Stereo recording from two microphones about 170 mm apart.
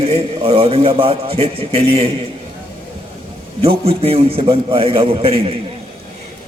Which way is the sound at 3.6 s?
35° right (ahead or behind).